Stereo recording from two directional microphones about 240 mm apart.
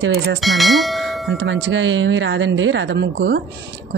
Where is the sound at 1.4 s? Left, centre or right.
Right.